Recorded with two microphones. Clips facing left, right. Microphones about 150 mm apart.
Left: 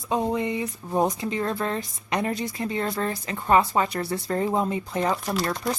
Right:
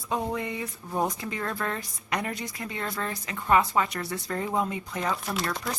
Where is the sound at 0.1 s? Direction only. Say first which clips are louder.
Left 5 dB; 20° left (ahead or behind).